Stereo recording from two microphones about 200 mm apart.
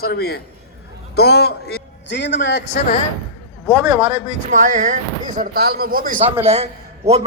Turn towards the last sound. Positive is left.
turn(degrees=-30)  # may be behind; listen again after turning